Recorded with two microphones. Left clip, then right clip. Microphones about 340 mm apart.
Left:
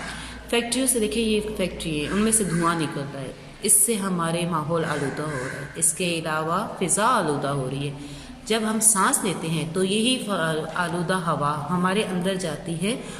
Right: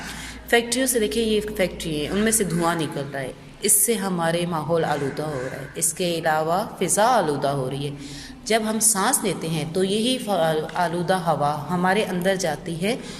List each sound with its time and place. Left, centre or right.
0.5 s a woman's voice: centre